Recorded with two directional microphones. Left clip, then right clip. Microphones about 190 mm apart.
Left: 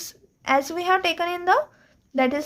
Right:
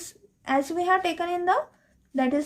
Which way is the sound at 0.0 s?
40° left (ahead or behind).